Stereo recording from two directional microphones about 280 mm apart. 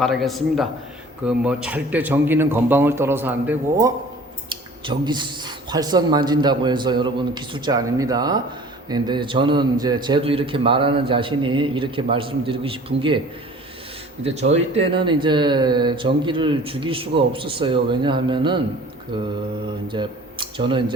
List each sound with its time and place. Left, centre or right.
0.0 s a man's voice: centre
14.3 s speech: right